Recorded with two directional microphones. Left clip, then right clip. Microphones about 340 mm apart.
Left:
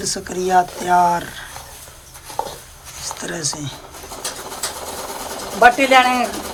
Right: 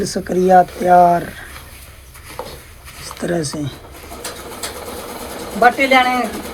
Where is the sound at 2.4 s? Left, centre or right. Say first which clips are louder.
Left 5 dB; left.